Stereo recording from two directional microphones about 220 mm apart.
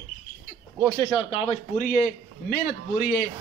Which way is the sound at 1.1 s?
25° left (ahead or behind).